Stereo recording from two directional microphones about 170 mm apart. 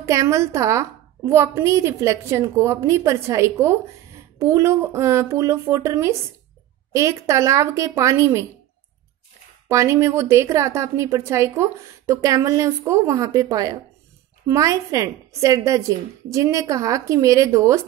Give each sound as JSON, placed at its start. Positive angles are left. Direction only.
{"t": 0.0, "sound": "a woman's voice", "side_deg": -15}
{"t": 9.7, "sound": "a woman's voice", "side_deg": -15}